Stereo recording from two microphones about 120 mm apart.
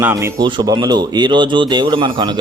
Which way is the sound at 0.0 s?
25° right (ahead or behind).